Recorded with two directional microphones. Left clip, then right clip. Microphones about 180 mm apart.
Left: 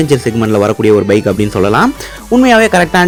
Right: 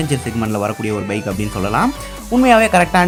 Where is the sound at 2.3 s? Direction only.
20° left (ahead or behind).